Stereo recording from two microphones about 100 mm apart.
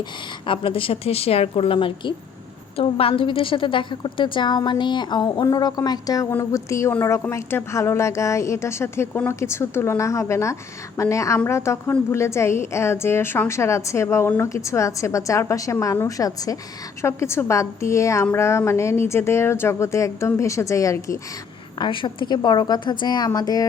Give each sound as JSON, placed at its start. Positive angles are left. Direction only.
{"t": 0.0, "sound": "a woman's voice", "side_deg": 55}
{"t": 2.7, "sound": "a woman's voice", "side_deg": 70}
{"t": 21.8, "sound": "a woman's voice", "side_deg": 55}